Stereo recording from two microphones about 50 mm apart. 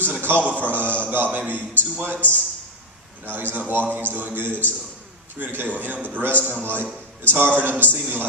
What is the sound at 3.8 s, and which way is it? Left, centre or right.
A man's voice, right.